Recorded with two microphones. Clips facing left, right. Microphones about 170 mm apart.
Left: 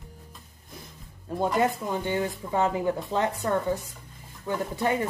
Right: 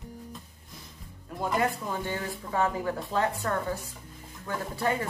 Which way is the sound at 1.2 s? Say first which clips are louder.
Left 4 dB; 25° left (ahead or behind).